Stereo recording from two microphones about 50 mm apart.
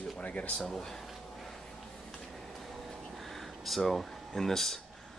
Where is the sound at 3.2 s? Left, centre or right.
Centre.